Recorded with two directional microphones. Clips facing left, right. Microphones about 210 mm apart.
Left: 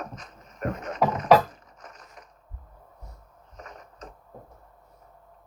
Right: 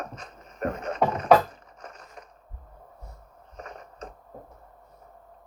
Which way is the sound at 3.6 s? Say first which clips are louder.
Right 3 dB; 30° right (ahead or behind).